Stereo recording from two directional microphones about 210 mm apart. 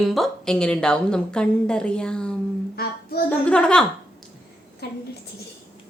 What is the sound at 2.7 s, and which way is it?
Child singing, 45° left (ahead or behind).